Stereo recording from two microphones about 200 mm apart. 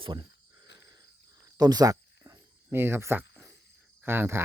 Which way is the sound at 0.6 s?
60° left (ahead or behind).